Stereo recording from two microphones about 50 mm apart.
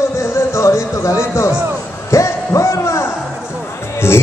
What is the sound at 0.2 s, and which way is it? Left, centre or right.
Music, left.